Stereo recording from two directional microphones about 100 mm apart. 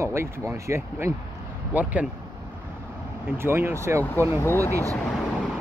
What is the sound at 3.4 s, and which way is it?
Speech, 25° right (ahead or behind).